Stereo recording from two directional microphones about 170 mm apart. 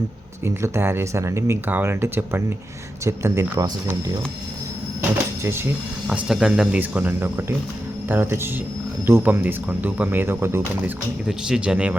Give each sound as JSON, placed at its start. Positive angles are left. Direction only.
{"t": 0.4, "sound": "speech", "side_deg": -15}
{"t": 5.4, "sound": "speech", "side_deg": -15}